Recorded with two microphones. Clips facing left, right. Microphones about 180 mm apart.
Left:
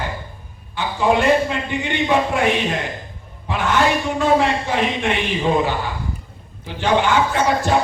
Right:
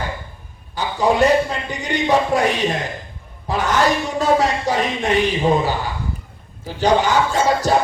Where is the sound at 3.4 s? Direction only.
40° right (ahead or behind).